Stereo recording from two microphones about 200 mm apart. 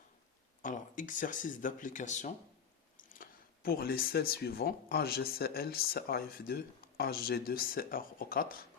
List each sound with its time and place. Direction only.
0.6 s speech: 40° left (ahead or behind)